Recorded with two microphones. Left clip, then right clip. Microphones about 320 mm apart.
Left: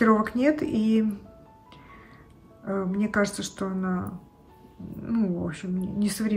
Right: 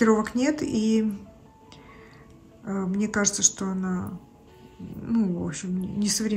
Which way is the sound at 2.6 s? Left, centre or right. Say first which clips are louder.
Left 1 dB; centre.